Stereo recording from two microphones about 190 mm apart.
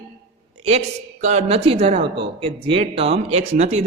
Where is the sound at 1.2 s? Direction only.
35° right (ahead or behind).